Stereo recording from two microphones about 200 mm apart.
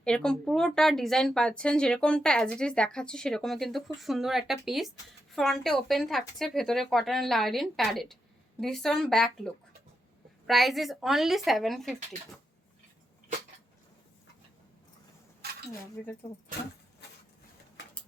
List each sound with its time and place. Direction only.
0.0 s speech: 5° left (ahead or behind)
15.4 s cutlery: 55° right (ahead or behind)
16.0 s speech: 5° left (ahead or behind)